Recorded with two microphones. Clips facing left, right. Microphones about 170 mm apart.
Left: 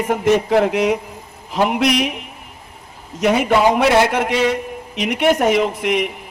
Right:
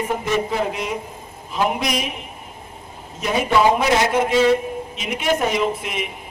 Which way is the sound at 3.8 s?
70° left (ahead or behind).